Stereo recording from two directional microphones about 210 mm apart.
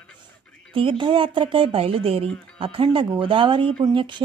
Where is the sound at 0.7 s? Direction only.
25° right (ahead or behind).